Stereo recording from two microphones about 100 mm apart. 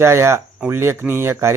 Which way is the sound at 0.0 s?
25° right (ahead or behind).